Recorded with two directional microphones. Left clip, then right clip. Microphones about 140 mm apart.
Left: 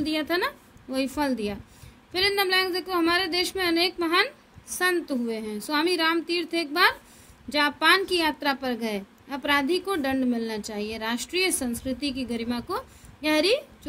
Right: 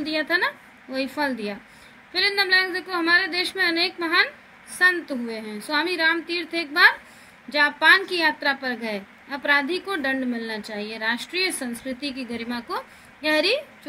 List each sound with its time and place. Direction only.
0.0 s a woman's voice: 30° left (ahead or behind)